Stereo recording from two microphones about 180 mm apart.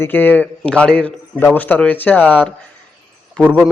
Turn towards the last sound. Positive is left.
turn(degrees=5)  # may be behind; listen again after turning